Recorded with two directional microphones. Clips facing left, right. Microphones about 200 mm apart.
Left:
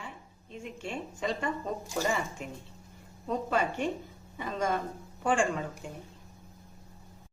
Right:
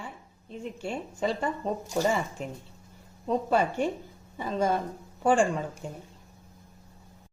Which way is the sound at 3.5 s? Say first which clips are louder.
Right 3 dB; 35° right (ahead or behind).